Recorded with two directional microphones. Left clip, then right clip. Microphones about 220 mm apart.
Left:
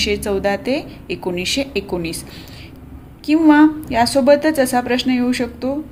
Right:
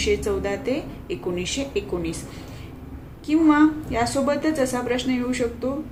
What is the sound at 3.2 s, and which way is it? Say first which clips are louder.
A woman's voice: left 6 dB; 45° left (ahead or behind).